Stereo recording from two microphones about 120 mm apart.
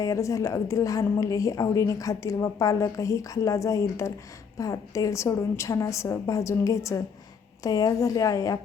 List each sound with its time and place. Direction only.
0.0 s a woman's voice: 30° left (ahead or behind)